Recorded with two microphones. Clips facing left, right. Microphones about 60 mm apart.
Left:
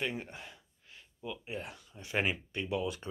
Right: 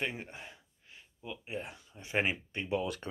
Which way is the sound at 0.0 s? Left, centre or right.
Centre.